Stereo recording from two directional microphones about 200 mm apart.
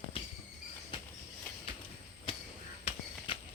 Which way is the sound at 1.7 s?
25° left (ahead or behind).